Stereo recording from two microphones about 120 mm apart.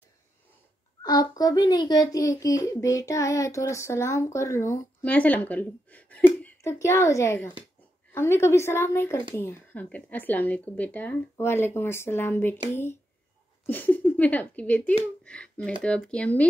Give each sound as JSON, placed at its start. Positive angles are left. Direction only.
{"t": 1.0, "sound": "a child's voice", "side_deg": 30}
{"t": 2.2, "sound": "child singing", "side_deg": 25}
{"t": 5.0, "sound": "speech", "side_deg": 10}
{"t": 6.6, "sound": "child singing", "side_deg": 25}
{"t": 9.3, "sound": "speech", "side_deg": 20}